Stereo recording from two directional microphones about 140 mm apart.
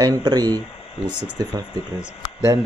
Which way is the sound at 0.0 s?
30° right (ahead or behind).